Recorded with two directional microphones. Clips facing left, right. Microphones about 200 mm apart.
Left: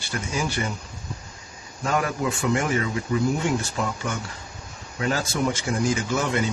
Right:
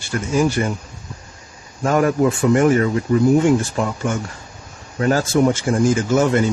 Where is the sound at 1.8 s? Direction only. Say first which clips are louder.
Right 9 dB; 50° right (ahead or behind).